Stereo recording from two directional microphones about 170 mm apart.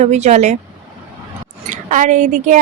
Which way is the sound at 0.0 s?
40° right (ahead or behind).